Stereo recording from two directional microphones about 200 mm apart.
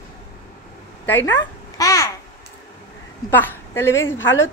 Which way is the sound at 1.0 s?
10° left (ahead or behind).